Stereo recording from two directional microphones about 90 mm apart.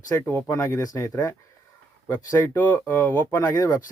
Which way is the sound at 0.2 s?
25° left (ahead or behind).